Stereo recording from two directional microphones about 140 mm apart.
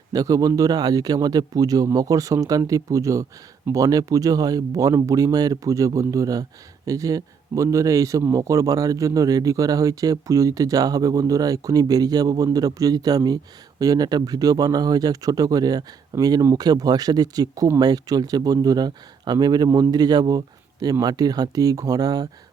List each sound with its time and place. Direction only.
0.1 s speech: 25° right (ahead or behind)